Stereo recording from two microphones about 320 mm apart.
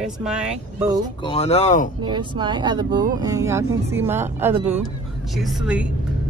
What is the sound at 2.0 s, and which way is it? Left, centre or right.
Speech, centre.